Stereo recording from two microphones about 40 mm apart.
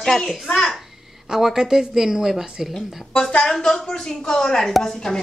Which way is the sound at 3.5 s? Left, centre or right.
Centre.